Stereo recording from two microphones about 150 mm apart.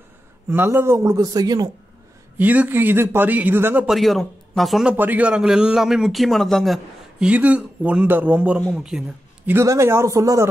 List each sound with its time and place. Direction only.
0.5 s a man's voice: 15° right (ahead or behind)
2.3 s a man's voice: 10° right (ahead or behind)
3.9 s speech: centre (ahead or behind)
4.9 s a man's voice: 10° right (ahead or behind)
9.5 s a man's voice: 20° right (ahead or behind)